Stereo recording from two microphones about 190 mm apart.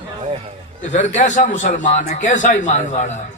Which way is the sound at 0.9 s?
40° left (ahead or behind).